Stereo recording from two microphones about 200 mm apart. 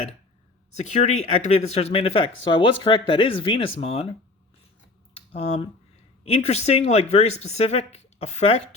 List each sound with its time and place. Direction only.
1.2 s speech: 30° left (ahead or behind)
5.3 s speech: 30° left (ahead or behind)